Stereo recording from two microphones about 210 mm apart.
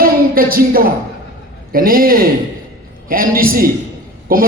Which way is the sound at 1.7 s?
45° right (ahead or behind).